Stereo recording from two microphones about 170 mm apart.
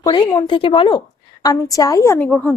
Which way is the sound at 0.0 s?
25° left (ahead or behind).